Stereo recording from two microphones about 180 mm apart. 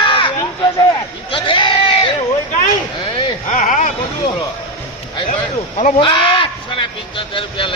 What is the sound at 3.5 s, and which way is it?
Speech, 45° left (ahead or behind).